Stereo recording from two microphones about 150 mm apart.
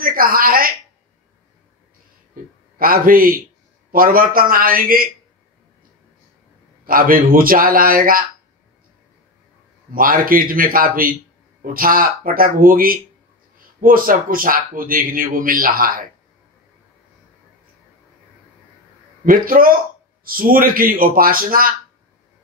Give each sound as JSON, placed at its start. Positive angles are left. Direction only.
{"t": 0.0, "sound": "a woman's voice", "side_deg": -70}
{"t": 2.8, "sound": "a man's voice", "side_deg": -70}
{"t": 6.8, "sound": "a man's voice", "side_deg": -70}
{"t": 9.9, "sound": "a man's voice", "side_deg": -70}
{"t": 19.2, "sound": "a man's voice", "side_deg": -70}